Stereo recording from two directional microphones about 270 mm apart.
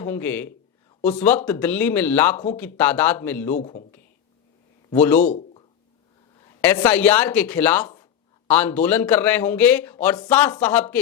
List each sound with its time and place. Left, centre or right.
0.0 s a man's voice: centre
3.5 s a man's voice: left
4.9 s a man's voice: centre
5.2 s a sound: left
6.4 s a man's voice: centre